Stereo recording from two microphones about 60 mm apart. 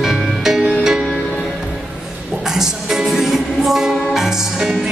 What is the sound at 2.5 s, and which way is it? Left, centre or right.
Music, centre.